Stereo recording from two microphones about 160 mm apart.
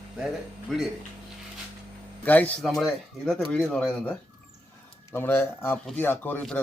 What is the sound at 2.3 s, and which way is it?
Speech, 10° left (ahead or behind).